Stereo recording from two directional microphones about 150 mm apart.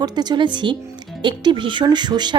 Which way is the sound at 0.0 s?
30° right (ahead or behind).